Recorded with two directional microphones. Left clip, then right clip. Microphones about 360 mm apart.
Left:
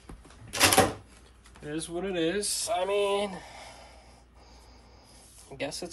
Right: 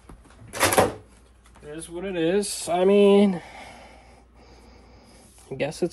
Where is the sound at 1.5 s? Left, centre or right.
Centre.